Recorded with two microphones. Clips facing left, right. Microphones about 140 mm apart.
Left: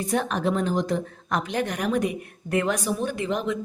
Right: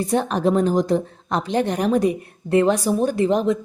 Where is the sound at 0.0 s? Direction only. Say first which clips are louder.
Right 5 dB; 30° right (ahead or behind).